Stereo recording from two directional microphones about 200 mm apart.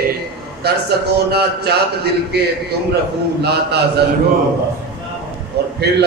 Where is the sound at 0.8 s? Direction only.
55° right (ahead or behind).